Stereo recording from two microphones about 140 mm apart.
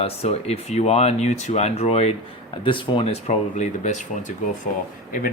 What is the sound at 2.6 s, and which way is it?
Speech, 35° left (ahead or behind).